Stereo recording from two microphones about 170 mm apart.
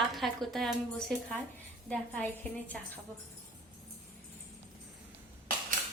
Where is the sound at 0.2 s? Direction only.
Centre (ahead or behind).